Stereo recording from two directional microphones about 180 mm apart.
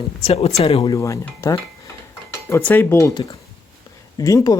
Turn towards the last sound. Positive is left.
turn(degrees=20)  # may be behind; listen again after turning